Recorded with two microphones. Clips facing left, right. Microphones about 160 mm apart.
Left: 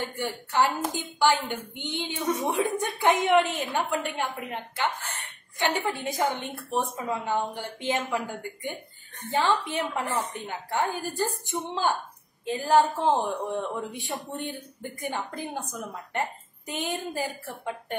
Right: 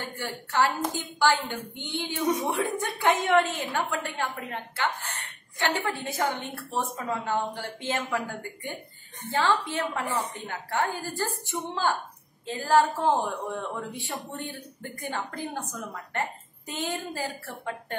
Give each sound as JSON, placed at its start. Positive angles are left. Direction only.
{"t": 0.0, "sound": "a woman's voice", "side_deg": 15}